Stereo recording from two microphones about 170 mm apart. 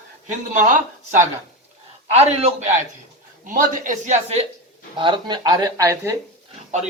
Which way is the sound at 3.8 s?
45° right (ahead or behind).